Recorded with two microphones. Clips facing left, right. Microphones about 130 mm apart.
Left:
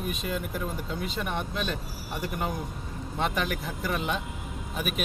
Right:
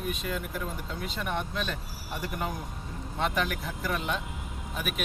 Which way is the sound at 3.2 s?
10° left (ahead or behind).